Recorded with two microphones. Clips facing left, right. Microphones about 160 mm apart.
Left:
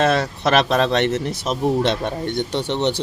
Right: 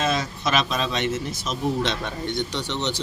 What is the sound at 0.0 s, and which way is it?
Speech, 65° left (ahead or behind).